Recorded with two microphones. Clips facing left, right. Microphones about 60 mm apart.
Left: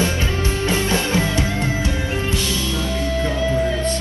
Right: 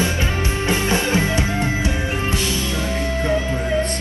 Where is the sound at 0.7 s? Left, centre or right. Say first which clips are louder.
Right 2 dB; right.